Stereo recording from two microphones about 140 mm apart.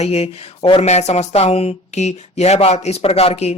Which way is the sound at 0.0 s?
50° left (ahead or behind).